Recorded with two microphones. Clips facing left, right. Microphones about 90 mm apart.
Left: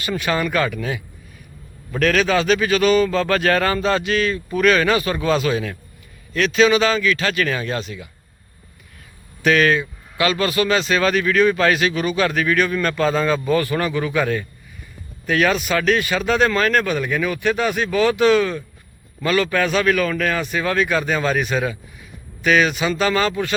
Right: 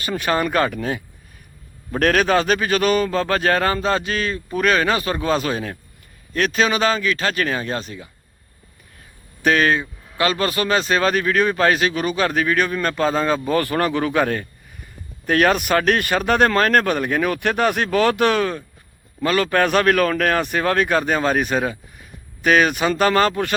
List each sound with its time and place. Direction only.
0.0 s speech: 40° right (ahead or behind)
9.4 s speech: 30° right (ahead or behind)
19.5 s speech: 55° right (ahead or behind)